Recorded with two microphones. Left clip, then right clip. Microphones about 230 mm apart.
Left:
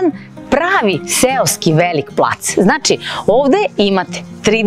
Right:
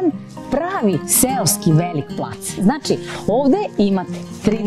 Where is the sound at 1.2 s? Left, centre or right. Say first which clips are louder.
Left 7 dB; centre.